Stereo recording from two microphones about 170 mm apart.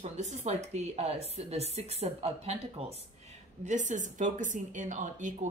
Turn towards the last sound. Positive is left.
turn(degrees=-45)  # may be behind; listen again after turning